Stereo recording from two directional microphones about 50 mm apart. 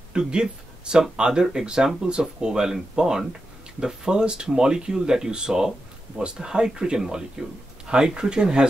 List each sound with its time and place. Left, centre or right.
0.1 s speech: centre